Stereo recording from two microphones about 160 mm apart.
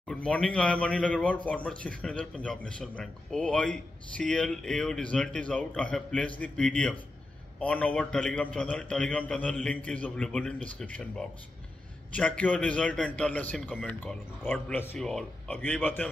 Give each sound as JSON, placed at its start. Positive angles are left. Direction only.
{"t": 0.1, "sound": "speech", "side_deg": 5}